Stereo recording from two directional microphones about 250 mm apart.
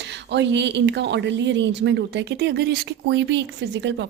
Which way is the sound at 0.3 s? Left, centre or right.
Right.